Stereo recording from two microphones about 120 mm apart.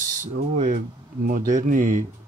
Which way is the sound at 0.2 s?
90° right.